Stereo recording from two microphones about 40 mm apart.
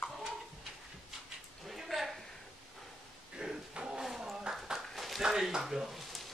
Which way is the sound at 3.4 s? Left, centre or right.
Centre.